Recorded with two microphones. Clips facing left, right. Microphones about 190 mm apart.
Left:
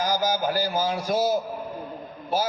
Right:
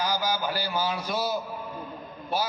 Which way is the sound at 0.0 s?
45° left (ahead or behind).